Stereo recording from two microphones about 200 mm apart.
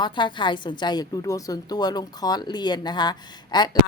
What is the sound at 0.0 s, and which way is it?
A woman's voice, 25° left (ahead or behind).